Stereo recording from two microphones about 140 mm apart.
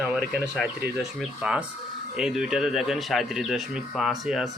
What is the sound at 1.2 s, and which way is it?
Speech, 5° right (ahead or behind).